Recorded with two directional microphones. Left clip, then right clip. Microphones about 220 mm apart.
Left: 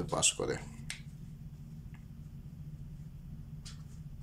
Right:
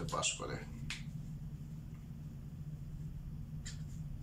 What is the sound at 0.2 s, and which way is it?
Speech, 30° left (ahead or behind).